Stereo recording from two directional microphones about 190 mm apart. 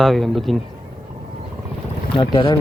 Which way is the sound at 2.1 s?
25° left (ahead or behind).